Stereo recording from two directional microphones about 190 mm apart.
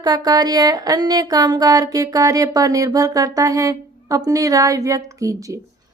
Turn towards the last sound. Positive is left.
turn(degrees=-15)  # may be behind; listen again after turning